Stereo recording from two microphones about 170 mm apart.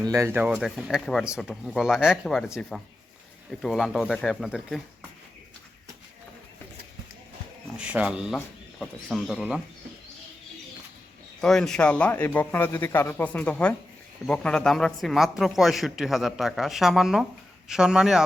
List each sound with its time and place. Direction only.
0.0 s speech: 20° right (ahead or behind); by 4.8 s centre (ahead or behind)
7.8 s speech: 5° right (ahead or behind)
11.3 s speech: centre (ahead or behind)